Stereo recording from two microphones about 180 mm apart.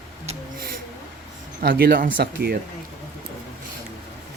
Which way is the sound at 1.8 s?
60° right (ahead or behind).